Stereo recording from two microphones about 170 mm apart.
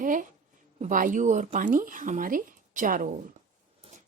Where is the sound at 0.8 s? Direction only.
50° right (ahead or behind).